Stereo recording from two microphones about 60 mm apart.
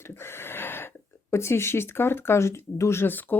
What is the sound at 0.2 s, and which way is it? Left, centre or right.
Gasp, left.